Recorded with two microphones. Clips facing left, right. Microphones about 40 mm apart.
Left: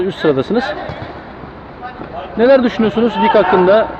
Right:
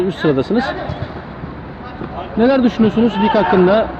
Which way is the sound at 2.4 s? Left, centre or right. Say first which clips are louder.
Left 2 dB; left.